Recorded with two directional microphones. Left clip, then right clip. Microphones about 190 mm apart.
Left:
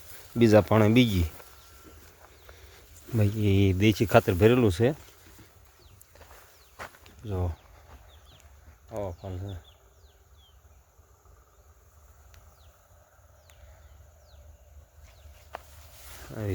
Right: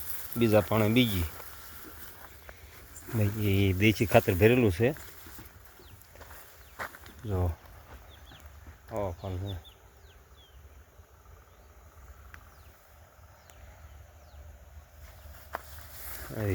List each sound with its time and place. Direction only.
0.3 s speech: 45° left (ahead or behind)
3.2 s speech: 35° left (ahead or behind)
6.7 s walk: centre (ahead or behind)
7.3 s speech: 10° left (ahead or behind)
8.9 s speech: 10° left (ahead or behind)